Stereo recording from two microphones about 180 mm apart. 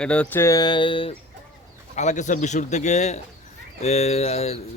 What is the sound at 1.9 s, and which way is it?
A man's voice, 40° left (ahead or behind).